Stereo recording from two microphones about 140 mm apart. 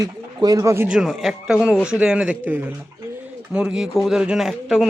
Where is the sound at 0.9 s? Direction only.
5° right (ahead or behind).